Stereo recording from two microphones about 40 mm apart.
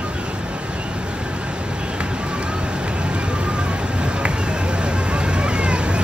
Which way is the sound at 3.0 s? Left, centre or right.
Right.